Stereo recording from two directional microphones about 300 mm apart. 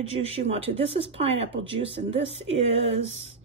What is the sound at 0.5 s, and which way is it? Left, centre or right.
Speech, centre.